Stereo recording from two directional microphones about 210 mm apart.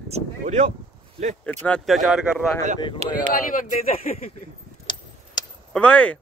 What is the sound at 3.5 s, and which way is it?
Speech, 40° left (ahead or behind).